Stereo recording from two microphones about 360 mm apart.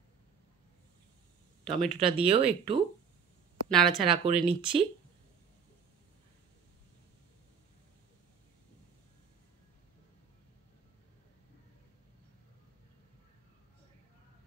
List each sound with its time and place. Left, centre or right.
1.6 s speech: centre
2.0 s speech: centre
3.6 s speech: centre
4.1 s speech: centre